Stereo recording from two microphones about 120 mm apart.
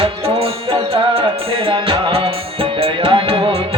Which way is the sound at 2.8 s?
45° right (ahead or behind).